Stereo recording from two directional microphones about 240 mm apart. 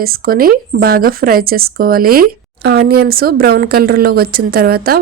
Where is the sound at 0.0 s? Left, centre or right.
Right.